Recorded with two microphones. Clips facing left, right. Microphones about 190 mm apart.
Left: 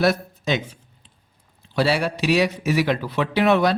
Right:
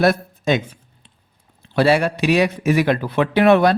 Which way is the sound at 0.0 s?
50° right (ahead or behind).